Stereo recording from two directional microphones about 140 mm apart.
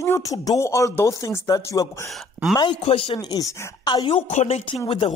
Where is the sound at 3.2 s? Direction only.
25° left (ahead or behind).